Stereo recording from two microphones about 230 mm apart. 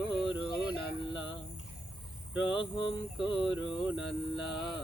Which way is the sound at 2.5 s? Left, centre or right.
Left.